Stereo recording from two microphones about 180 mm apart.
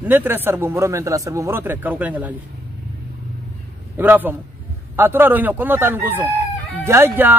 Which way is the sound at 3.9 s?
10° right (ahead or behind).